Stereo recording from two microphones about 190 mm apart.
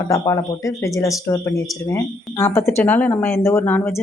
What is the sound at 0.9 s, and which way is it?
A woman's voice, 15° left (ahead or behind).